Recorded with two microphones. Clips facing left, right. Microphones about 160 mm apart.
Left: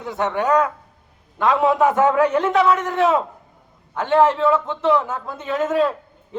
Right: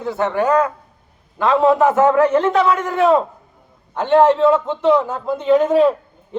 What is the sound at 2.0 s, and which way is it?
Speech, 10° left (ahead or behind).